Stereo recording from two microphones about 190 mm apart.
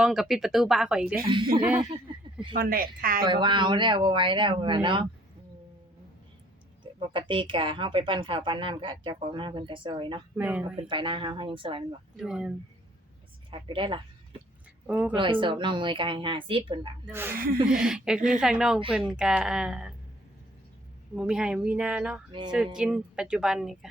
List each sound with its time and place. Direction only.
0.0 s speech: centre (ahead or behind)
2.6 s speech: 50° right (ahead or behind)
3.2 s a woman's voice: 25° right (ahead or behind)
7.1 s a woman's voice: 25° right (ahead or behind)
10.3 s speech: 10° right (ahead or behind)
10.8 s a woman's voice: 25° right (ahead or behind)
12.1 s speech: 5° right (ahead or behind)
13.5 s a woman's voice: 25° right (ahead or behind)
14.8 s a woman's voice: 5° right (ahead or behind)
15.1 s a woman's voice: 25° right (ahead or behind)
17.1 s speech: 10° right (ahead or behind)
21.2 s speech: 5° right (ahead or behind)
22.3 s a woman's voice: 25° right (ahead or behind)
22.5 s speech: 5° right (ahead or behind)